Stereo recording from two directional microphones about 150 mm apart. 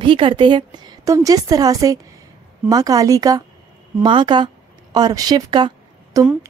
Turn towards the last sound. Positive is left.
turn(degrees=-25)  # may be behind; listen again after turning